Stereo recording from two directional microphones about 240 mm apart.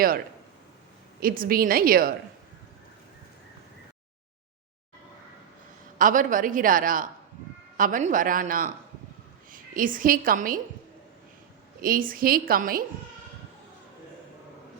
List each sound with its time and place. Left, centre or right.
1.2 s a woman's voice: right
6.0 s a woman's voice: right
11.8 s a woman's voice: right